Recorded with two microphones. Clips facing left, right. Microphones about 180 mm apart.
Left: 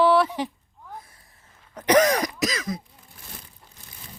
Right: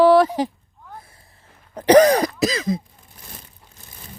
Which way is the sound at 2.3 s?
30° right (ahead or behind).